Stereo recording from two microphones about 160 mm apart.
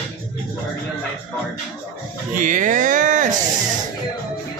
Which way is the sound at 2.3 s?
55° right (ahead or behind).